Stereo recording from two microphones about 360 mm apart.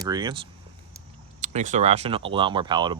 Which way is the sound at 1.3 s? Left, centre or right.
Centre.